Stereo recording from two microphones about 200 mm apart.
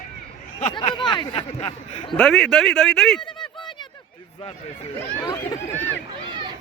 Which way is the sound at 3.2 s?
25° left (ahead or behind).